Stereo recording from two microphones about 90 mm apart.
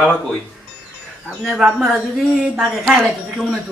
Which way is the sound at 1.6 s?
5° right (ahead or behind).